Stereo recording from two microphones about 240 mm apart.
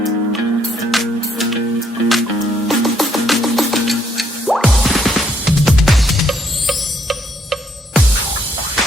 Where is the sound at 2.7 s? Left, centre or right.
Centre.